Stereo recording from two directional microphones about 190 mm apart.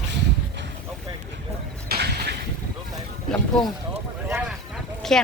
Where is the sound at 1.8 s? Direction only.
60° right (ahead or behind).